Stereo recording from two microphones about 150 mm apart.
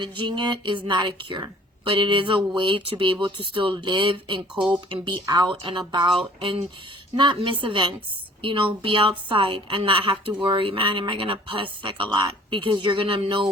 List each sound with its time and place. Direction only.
0.0 s a woman's voice: 30° right (ahead or behind)